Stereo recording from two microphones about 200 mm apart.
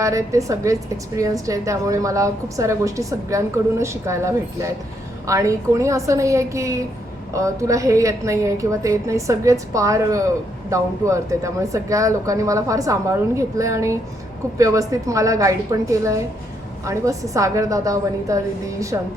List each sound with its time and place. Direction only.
0.0 s a woman's voice: 15° right (ahead or behind)